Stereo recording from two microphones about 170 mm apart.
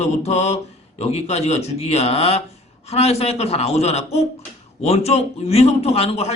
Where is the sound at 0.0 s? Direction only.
40° left (ahead or behind).